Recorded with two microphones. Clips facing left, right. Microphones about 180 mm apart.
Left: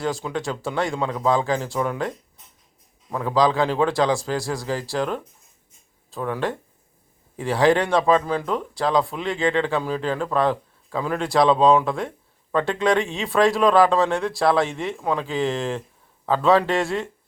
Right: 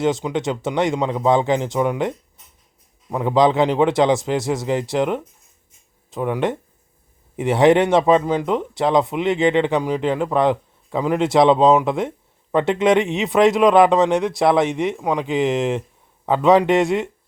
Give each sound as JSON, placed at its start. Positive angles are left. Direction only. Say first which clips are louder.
{"t": 0.0, "sound": "speech", "louder": "right 6 dB", "side_deg": -20}